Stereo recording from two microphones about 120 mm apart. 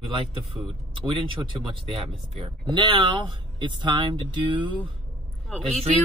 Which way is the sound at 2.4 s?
40° right (ahead or behind).